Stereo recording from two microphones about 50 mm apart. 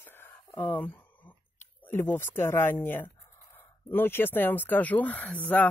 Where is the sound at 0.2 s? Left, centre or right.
Left.